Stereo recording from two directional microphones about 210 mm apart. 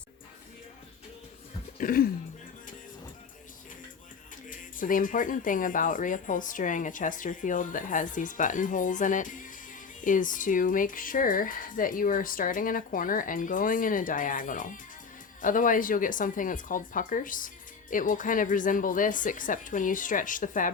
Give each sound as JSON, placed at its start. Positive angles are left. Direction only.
{"t": 1.8, "sound": "speech", "side_deg": 45}
{"t": 4.4, "sound": "speech", "side_deg": 40}